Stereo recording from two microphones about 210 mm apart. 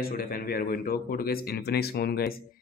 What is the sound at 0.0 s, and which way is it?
Speech, 45° left (ahead or behind).